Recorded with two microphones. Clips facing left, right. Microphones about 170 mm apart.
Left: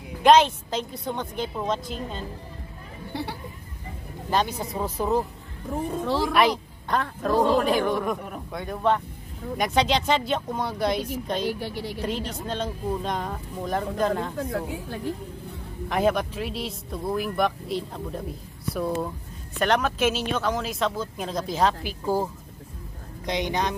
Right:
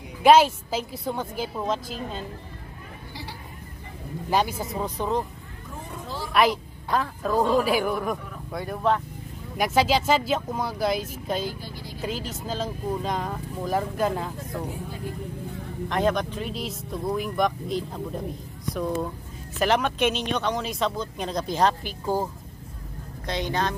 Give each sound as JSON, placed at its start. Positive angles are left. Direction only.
{"t": 0.2, "sound": "speech", "side_deg": -5}
{"t": 3.1, "sound": "speech", "side_deg": 60}
{"t": 4.3, "sound": "speech", "side_deg": -10}
{"t": 5.9, "sound": "speech", "side_deg": 90}
{"t": 6.3, "sound": "a woman's voice", "side_deg": 0}
{"t": 11.4, "sound": "speech", "side_deg": 70}
{"t": 12.0, "sound": "speech", "side_deg": 0}
{"t": 15.9, "sound": "speech", "side_deg": 5}
{"t": 19.6, "sound": "speech", "side_deg": 0}
{"t": 23.2, "sound": "speech", "side_deg": 15}